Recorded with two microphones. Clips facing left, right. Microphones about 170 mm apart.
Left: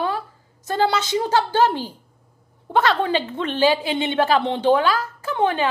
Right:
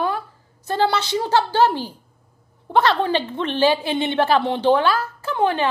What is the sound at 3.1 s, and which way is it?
A woman's voice, 15° left (ahead or behind).